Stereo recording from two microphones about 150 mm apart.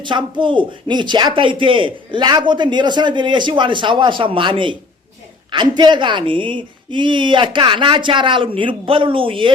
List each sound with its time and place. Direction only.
0.0 s speech: 30° right (ahead or behind)